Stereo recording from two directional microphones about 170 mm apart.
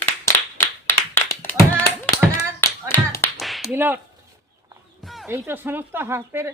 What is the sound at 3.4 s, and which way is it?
Clapping, centre (ahead or behind).